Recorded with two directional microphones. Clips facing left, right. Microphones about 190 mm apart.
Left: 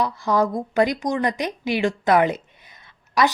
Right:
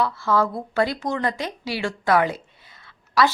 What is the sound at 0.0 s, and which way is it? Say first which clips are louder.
A woman's voice: left 1 dB; 15° left (ahead or behind).